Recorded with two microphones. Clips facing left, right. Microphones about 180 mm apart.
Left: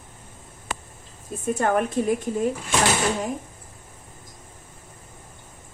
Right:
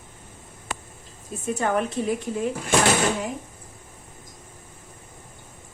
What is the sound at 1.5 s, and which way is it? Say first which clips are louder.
Speech: left 2 dB; 50° left (ahead or behind).